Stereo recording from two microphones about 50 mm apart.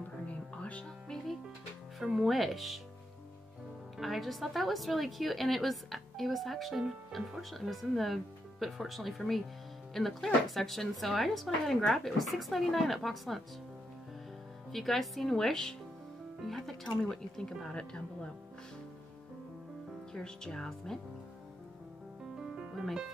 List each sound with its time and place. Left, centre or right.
0.3 s music: left
1.1 s music: centre
2.1 s a woman's voice: centre
4.0 s a woman's voice: centre
14.7 s a woman's voice: centre
20.1 s speech: centre
22.4 s music: centre